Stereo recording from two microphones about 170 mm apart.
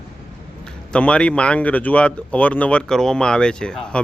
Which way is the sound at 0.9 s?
5° left (ahead or behind).